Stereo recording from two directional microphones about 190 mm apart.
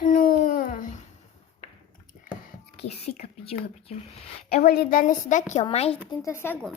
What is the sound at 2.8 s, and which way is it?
A woman's voice, 35° left (ahead or behind).